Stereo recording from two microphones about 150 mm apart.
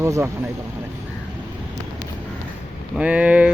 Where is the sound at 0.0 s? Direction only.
20° right (ahead or behind).